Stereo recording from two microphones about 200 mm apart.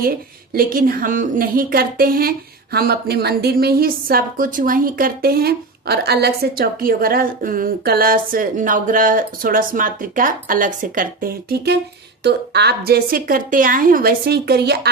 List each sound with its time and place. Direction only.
0.5 s a woman's voice: 45° right (ahead or behind)